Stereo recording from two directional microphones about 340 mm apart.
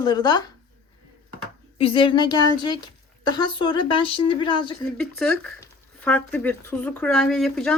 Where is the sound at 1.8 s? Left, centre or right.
Centre.